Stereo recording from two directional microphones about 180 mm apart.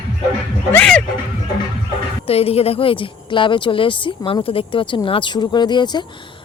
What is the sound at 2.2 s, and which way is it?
A woman's voice, 35° left (ahead or behind).